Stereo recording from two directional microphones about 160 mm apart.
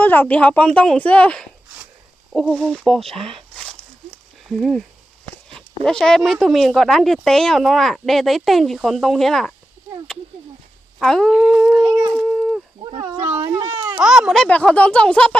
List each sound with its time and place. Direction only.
0.0 s speech: 10° left (ahead or behind)
11.0 s speech: centre (ahead or behind)
11.7 s speech: 25° right (ahead or behind)
12.1 s a sound: centre (ahead or behind)
13.2 s baby cry: 15° right (ahead or behind)
13.7 s a sound: 25° right (ahead or behind)
14.0 s speech: 5° right (ahead or behind)